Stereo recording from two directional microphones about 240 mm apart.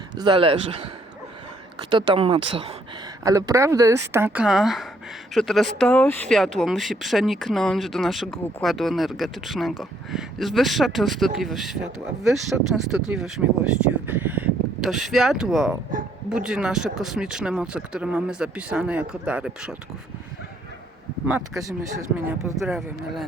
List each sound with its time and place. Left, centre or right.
0.2 s speech: right
1.9 s speech: centre
21.2 s speech: centre
22.6 s speech: centre